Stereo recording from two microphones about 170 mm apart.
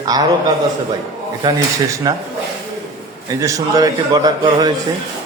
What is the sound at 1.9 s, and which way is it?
Speech, 25° right (ahead or behind).